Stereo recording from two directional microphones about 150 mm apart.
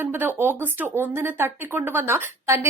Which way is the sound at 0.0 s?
15° right (ahead or behind).